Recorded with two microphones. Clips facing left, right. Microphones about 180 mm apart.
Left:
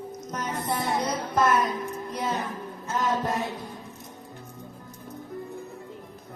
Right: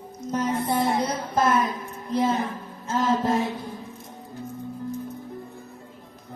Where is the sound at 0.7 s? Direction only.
30° right (ahead or behind).